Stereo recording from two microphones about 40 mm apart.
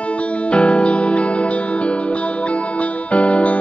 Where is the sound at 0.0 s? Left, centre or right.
Left.